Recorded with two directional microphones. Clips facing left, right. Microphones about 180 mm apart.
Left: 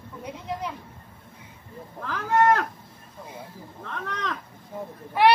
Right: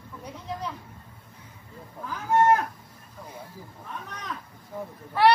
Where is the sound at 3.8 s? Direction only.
90° left.